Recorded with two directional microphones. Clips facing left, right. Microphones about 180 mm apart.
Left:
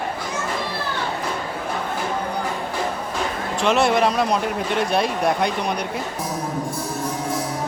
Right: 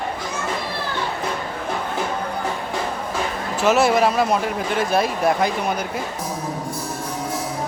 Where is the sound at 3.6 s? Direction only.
5° right (ahead or behind).